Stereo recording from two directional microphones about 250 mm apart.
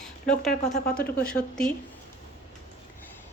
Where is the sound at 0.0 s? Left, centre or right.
Centre.